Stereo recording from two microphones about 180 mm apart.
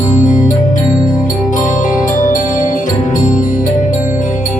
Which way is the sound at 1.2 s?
45° left (ahead or behind).